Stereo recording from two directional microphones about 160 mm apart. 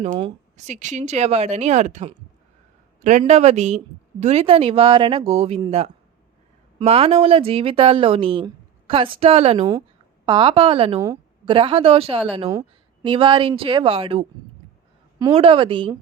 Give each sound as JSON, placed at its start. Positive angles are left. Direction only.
{"t": 0.5, "sound": "speech", "side_deg": -50}
{"t": 6.7, "sound": "speech", "side_deg": -40}
{"t": 12.5, "sound": "a sound", "side_deg": -20}
{"t": 13.1, "sound": "speech", "side_deg": -35}
{"t": 15.3, "sound": "speech", "side_deg": -35}